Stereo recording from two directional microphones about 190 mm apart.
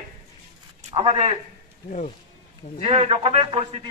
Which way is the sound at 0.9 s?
30° right (ahead or behind).